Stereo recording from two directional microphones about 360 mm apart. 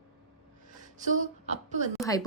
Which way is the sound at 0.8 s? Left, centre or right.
Right.